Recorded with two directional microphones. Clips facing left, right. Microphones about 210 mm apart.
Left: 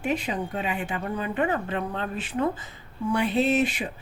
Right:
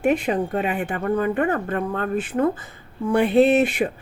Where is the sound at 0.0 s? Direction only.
55° right (ahead or behind).